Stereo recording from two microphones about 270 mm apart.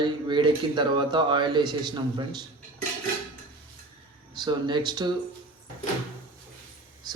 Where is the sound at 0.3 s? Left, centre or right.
Centre.